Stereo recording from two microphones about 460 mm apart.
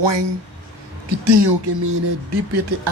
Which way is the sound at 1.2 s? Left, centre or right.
Right.